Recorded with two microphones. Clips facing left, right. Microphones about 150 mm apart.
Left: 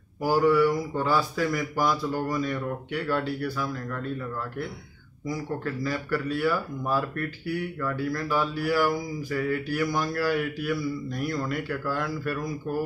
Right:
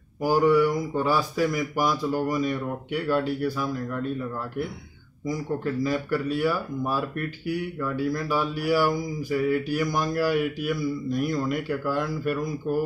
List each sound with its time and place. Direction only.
0.2 s speech: 15° right (ahead or behind)
5.9 s speech: 15° right (ahead or behind)